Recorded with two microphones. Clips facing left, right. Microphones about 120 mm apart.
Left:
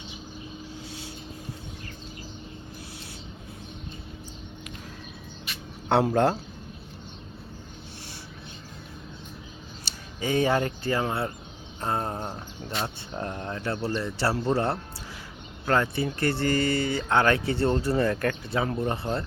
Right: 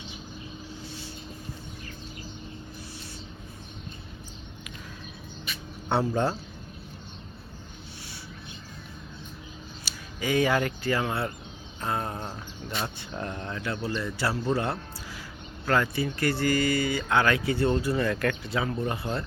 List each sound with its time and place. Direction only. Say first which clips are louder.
5.9 s speech: left 4 dB; 65° left (ahead or behind)
10.2 s speech: left 1 dB; 30° left (ahead or behind)